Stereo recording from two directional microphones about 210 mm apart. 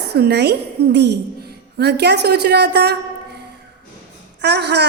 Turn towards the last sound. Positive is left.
turn(degrees=-50)  # may be behind; listen again after turning